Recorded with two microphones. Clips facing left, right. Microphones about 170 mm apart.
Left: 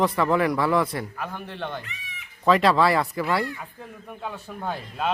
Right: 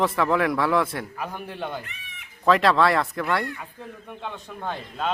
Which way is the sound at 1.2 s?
10° right (ahead or behind).